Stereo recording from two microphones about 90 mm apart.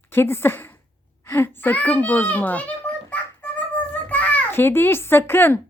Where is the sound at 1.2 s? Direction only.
25° left (ahead or behind).